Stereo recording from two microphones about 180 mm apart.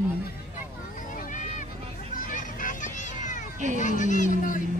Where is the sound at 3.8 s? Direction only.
45° left (ahead or behind).